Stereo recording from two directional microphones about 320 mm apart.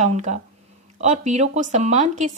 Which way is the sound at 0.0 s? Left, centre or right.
Right.